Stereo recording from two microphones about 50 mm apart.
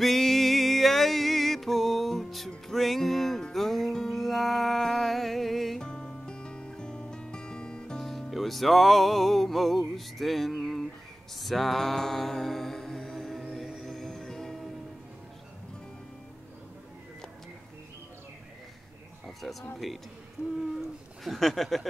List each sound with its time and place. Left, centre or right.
0.0 s music: centre
5.8 s music: centre
8.1 s music: centre
19.4 s speech: centre
21.2 s speech: centre